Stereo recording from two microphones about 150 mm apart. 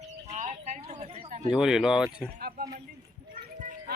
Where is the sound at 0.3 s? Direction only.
55° right (ahead or behind).